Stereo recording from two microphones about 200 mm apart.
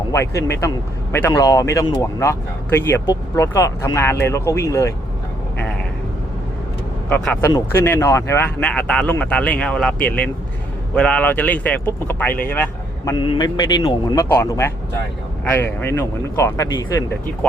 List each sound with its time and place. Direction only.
0.1 s speech: 15° left (ahead or behind)
7.1 s speech: 10° left (ahead or behind)
13.1 s speech: 25° left (ahead or behind)